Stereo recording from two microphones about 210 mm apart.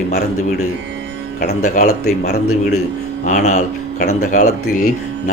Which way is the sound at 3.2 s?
35° left (ahead or behind).